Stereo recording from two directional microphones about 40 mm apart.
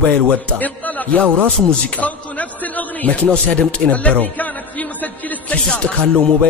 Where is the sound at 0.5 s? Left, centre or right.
Left.